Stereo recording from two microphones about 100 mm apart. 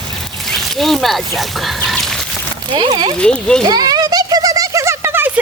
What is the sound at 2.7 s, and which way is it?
Speech, 55° right (ahead or behind).